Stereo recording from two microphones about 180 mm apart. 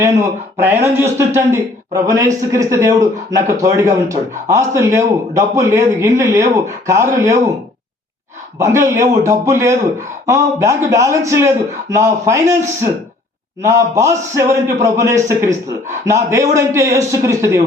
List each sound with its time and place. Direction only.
0.9 s speech: 15° right (ahead or behind)
8.5 s speech: 15° right (ahead or behind)
13.6 s speech: 15° right (ahead or behind)